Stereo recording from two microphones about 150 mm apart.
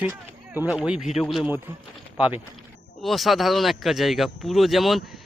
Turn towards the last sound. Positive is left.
turn(degrees=0)  # may be behind; listen again after turning